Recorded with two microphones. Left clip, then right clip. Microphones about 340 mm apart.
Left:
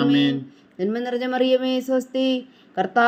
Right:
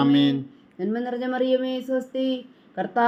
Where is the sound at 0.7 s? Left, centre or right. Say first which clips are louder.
Left 3 dB; left.